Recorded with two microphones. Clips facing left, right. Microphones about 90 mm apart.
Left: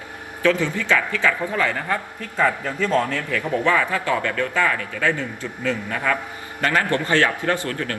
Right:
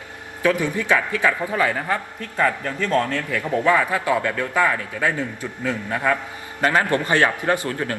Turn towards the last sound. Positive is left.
turn(degrees=-20)  # may be behind; listen again after turning